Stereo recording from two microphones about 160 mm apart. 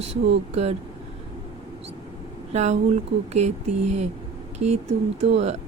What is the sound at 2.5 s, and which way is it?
Speech, 45° right (ahead or behind).